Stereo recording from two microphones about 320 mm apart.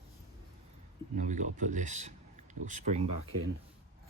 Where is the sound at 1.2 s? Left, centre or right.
Right.